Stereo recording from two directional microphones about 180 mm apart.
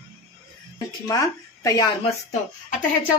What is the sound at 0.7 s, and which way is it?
A woman's voice, 20° left (ahead or behind).